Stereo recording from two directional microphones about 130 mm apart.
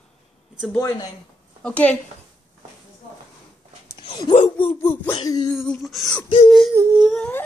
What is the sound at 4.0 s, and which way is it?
Speech, 40° left (ahead or behind).